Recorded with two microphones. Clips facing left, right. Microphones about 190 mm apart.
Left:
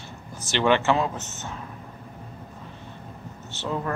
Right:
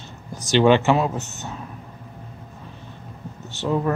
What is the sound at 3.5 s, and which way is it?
Speech, 15° right (ahead or behind).